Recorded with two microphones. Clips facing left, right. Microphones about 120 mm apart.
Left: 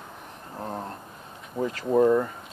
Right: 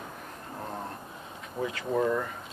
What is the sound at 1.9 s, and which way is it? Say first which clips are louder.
Speech: left 8 dB; 25° left (ahead or behind).